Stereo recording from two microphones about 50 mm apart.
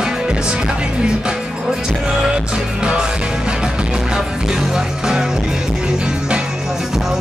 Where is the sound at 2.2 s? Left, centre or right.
Centre.